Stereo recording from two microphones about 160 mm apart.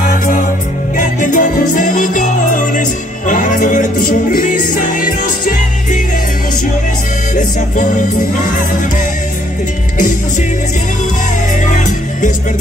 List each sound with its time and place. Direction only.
0.9 s music: 55° left (ahead or behind)
7.3 s music: 50° left (ahead or behind)